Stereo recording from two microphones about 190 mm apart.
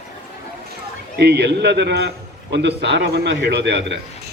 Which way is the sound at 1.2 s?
60° right (ahead or behind).